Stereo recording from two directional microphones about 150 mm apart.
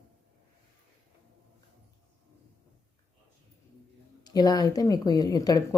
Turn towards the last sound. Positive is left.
turn(degrees=25)  # may be behind; listen again after turning